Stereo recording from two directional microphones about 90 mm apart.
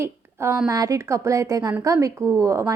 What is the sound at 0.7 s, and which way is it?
A woman's voice, 40° right (ahead or behind).